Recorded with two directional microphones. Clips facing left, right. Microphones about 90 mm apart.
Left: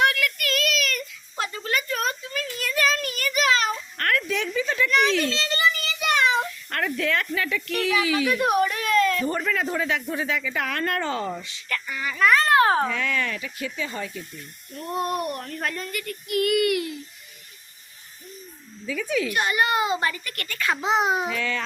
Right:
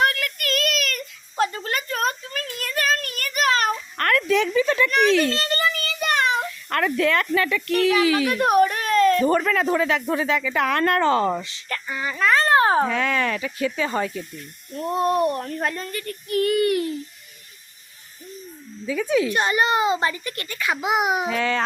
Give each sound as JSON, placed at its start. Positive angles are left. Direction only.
{"t": 0.0, "sound": "a sound", "side_deg": -40}
{"t": 4.3, "sound": "speech", "side_deg": -80}
{"t": 4.9, "sound": "a sound", "side_deg": -50}
{"t": 7.7, "sound": "a child's voice", "side_deg": -45}
{"t": 9.2, "sound": "speech", "side_deg": -80}
{"t": 11.7, "sound": "a child's voice", "side_deg": -25}
{"t": 12.9, "sound": "a child's voice", "side_deg": -40}
{"t": 13.3, "sound": "speech", "side_deg": -50}
{"t": 14.9, "sound": "speech", "side_deg": -30}
{"t": 15.8, "sound": "a child's voice", "side_deg": -35}
{"t": 18.9, "sound": "speech", "side_deg": -30}
{"t": 21.3, "sound": "a child's voice", "side_deg": -40}